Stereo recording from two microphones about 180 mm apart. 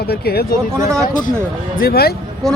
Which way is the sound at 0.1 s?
60° left (ahead or behind).